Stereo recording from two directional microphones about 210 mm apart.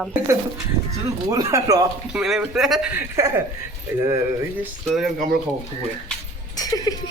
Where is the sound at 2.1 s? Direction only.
5° right (ahead or behind).